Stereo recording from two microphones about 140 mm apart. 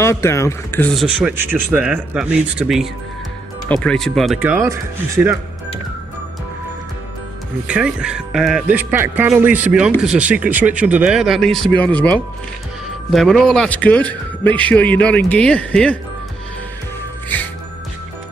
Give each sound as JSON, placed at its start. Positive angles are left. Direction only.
{"t": 0.0, "sound": "speech", "side_deg": 20}
{"t": 0.9, "sound": "speech", "side_deg": -5}
{"t": 3.6, "sound": "speech", "side_deg": 5}
{"t": 4.6, "sound": "speech", "side_deg": -20}
{"t": 7.6, "sound": "speech", "side_deg": -5}